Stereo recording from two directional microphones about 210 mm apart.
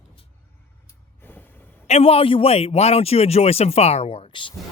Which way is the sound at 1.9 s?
30° left (ahead or behind).